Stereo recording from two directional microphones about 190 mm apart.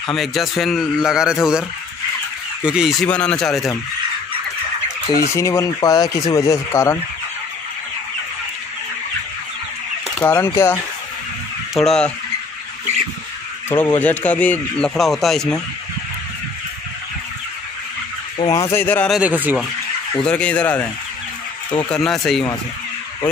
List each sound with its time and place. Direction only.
0.1 s a man's voice: centre (ahead or behind)
2.6 s a man's voice: 5° right (ahead or behind)
5.3 s a man's voice: 15° left (ahead or behind)
10.2 s a man's voice: 10° left (ahead or behind)
11.7 s a man's voice: 5° left (ahead or behind)
13.7 s a man's voice: 10° left (ahead or behind)
18.4 s a man's voice: 15° left (ahead or behind)
19.1 s speech: 10° right (ahead or behind)
20.2 s a man's voice: 5° left (ahead or behind)
21.9 s a man's voice: centre (ahead or behind)